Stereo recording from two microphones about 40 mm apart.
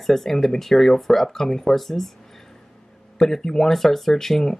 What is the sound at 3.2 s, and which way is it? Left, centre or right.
Speech, centre.